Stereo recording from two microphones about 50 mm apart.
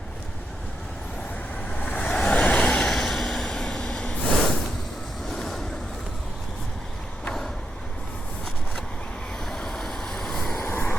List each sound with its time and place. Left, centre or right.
1.7 s vehicle: left
2.9 s vehicle: centre
5.3 s waves: centre
9.5 s vehicle: centre
10.6 s vehicle: left